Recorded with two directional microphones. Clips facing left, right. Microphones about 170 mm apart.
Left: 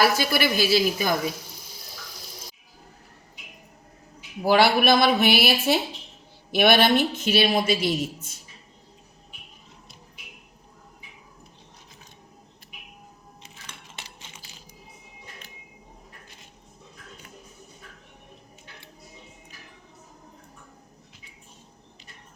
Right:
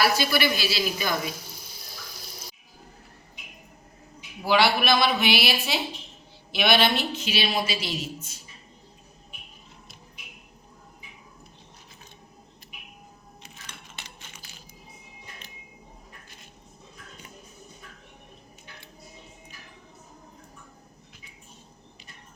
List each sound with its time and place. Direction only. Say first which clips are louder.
0.2 s a man's voice: left 2 dB; 45° left (ahead or behind)
4.4 s a man's voice: left 3 dB; 45° left (ahead or behind)
14.2 s coin: left 1 dB; 20° left (ahead or behind)